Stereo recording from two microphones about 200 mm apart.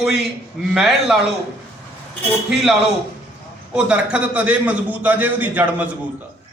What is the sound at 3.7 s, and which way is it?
A man's voice, 5° right (ahead or behind).